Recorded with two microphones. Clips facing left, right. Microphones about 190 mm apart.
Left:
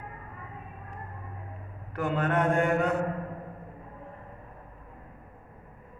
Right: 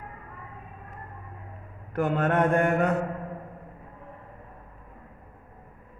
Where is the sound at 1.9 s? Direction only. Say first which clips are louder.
Right 3 dB; 50° right (ahead or behind).